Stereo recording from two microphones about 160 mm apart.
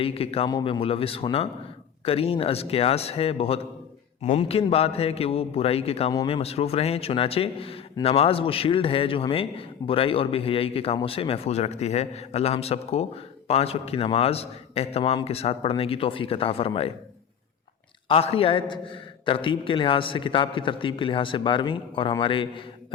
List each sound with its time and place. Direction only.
0.0 s a man's voice: 35° left (ahead or behind)
18.1 s a man's voice: 35° left (ahead or behind)